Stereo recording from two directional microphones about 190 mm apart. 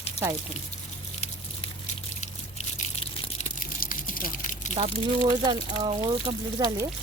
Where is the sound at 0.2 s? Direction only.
35° left (ahead or behind).